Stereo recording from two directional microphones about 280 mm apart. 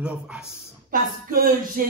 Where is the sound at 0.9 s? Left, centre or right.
Right.